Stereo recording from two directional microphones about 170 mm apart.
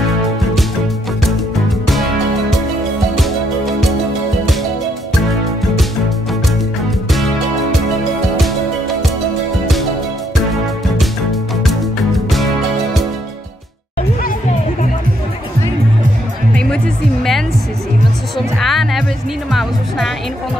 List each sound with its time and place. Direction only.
3.2 s music: centre (ahead or behind)
7.1 s music: centre (ahead or behind)
8.4 s music: centre (ahead or behind)
11.6 s music: centre (ahead or behind)
16.5 s music: 5° left (ahead or behind)
18.6 s music: centre (ahead or behind)